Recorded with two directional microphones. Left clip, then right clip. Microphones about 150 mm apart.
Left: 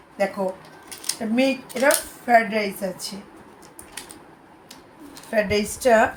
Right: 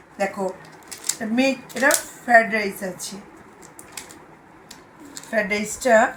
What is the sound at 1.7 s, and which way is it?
Speech, 45° left (ahead or behind).